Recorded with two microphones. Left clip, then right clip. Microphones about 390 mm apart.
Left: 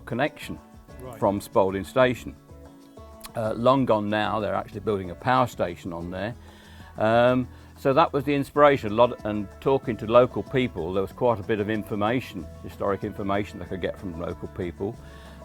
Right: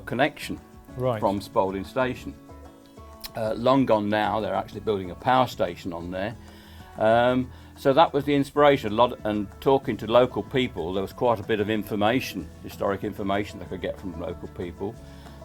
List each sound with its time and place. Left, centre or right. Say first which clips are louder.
0.0 s speech: right 3 dB; left
1.2 s speech: left 5 dB; left
3.2 s speech: left 1 dB; left